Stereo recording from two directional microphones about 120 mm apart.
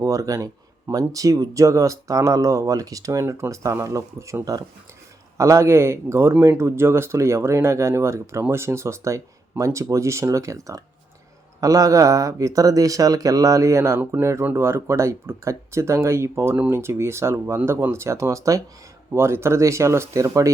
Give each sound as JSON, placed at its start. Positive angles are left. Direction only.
{"t": 0.0, "sound": "speech", "side_deg": -30}